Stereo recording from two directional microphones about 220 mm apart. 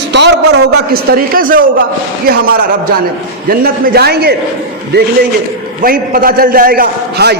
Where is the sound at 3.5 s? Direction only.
45° right (ahead or behind).